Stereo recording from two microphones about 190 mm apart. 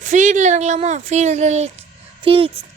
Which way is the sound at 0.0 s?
40° right (ahead or behind).